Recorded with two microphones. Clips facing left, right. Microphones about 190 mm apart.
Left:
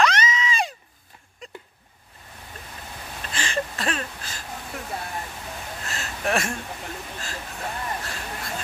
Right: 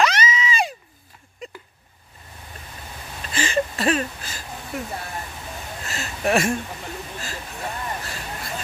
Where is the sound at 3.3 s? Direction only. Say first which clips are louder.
Right 5 dB; 5° right (ahead or behind).